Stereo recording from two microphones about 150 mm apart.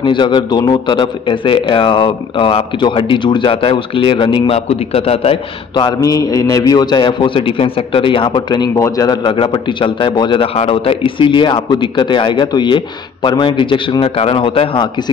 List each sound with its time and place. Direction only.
0.0 s a man's voice: 30° left (ahead or behind)